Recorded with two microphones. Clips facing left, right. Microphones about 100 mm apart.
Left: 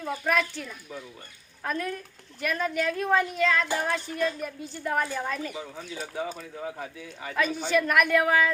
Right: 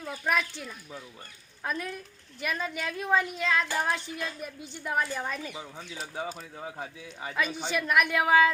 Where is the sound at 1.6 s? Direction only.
10° right (ahead or behind).